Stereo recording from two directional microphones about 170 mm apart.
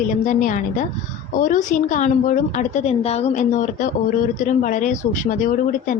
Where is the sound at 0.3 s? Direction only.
50° left (ahead or behind).